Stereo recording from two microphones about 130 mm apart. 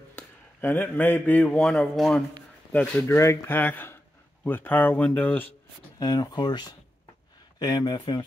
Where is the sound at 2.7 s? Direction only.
15° left (ahead or behind).